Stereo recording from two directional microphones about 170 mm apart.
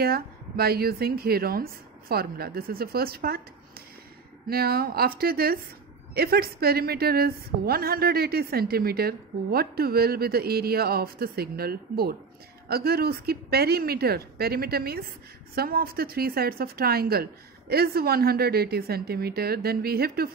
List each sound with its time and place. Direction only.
0.0 s a woman's voice: 65° right (ahead or behind)
4.5 s a woman's voice: 65° right (ahead or behind)